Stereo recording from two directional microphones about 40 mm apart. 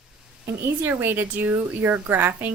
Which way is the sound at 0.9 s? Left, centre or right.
Right.